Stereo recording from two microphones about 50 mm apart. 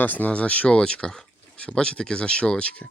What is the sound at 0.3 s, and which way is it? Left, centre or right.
Speech, left.